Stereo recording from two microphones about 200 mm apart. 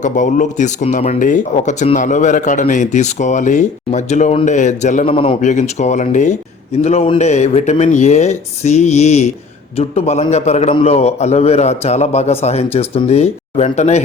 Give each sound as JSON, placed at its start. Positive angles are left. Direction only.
{"t": 0.0, "sound": "speech", "side_deg": 40}